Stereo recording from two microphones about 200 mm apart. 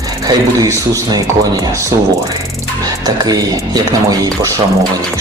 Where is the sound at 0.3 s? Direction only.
15° right (ahead or behind).